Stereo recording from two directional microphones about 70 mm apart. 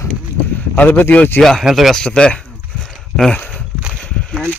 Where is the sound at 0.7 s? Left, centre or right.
Left.